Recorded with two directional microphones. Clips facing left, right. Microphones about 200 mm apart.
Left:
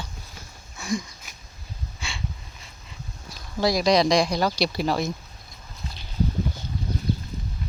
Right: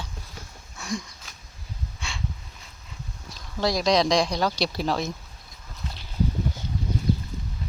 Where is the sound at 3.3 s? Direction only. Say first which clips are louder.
Left 2 dB; 5° left (ahead or behind).